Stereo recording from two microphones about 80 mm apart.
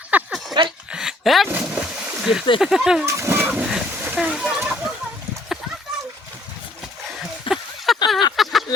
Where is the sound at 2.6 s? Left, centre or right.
Centre.